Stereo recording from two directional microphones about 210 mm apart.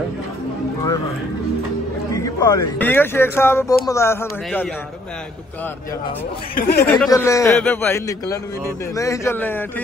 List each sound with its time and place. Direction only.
2.1 s speech: 15° left (ahead or behind)
6.5 s speech: 50° left (ahead or behind)
7.1 s speech: 15° left (ahead or behind)